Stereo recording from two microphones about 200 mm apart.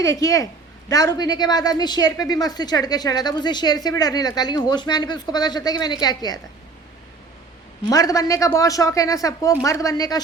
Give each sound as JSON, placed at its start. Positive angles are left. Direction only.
{"t": 0.0, "sound": "speech", "side_deg": 15}
{"t": 7.9, "sound": "speech", "side_deg": 15}